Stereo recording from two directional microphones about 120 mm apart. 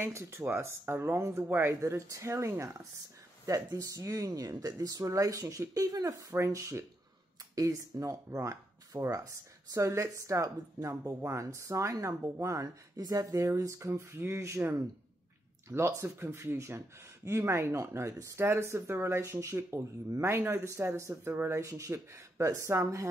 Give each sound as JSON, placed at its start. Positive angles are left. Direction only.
{"t": 0.0, "sound": "speech", "side_deg": -20}